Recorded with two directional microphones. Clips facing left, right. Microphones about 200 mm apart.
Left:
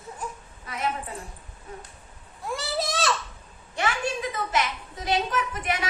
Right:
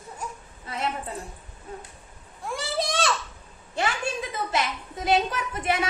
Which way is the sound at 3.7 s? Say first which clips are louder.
Even; 25° right (ahead or behind).